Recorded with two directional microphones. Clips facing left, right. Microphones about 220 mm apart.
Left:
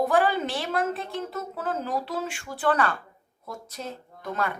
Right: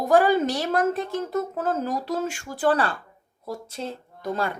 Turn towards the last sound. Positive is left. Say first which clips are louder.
# right 3 dB
turn(degrees=-30)  # may be behind; listen again after turning